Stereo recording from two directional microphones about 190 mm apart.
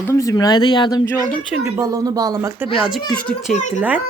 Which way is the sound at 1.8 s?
20° right (ahead or behind).